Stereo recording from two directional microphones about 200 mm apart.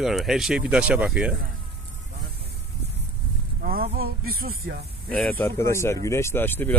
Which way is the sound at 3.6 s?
50° right (ahead or behind).